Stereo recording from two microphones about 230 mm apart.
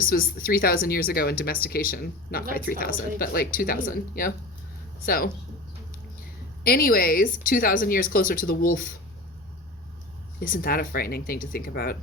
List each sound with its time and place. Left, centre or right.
0.0 s speech: left
6.7 s speech: left
10.4 s speech: left